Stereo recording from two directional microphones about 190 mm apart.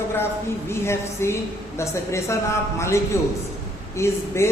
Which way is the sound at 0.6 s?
15° left (ahead or behind).